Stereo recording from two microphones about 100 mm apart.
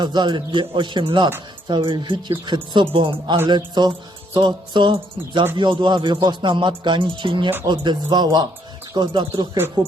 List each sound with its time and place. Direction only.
0.0 s a man's voice: 45° right (ahead or behind)